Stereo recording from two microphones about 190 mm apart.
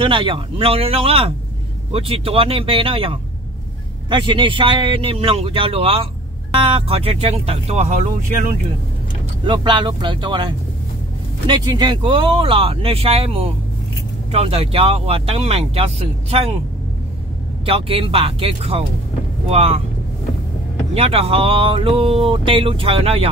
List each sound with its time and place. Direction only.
0.0 s speech: 25° right (ahead or behind)
9.4 s speech: 25° right (ahead or behind)
17.6 s speech: 30° right (ahead or behind)
20.9 s speech: 30° right (ahead or behind)